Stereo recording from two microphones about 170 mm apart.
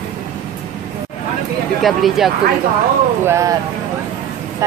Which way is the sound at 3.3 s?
20° right (ahead or behind).